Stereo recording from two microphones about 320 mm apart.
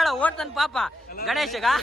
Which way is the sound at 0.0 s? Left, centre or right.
Centre.